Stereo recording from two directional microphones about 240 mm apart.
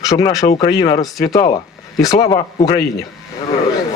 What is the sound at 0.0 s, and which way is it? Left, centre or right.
A man's voice, centre.